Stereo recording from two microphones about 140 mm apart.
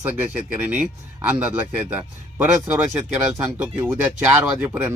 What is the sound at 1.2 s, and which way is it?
Speech, 10° right (ahead or behind).